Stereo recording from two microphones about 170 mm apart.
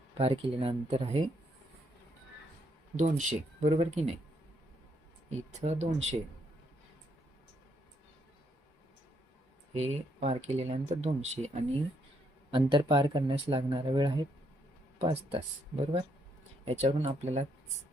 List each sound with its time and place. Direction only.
0.1 s speech: 35° right (ahead or behind)
2.9 s speech: 45° right (ahead or behind)
5.3 s speech: 40° right (ahead or behind)
9.7 s speech: 40° right (ahead or behind)
12.5 s speech: 30° right (ahead or behind)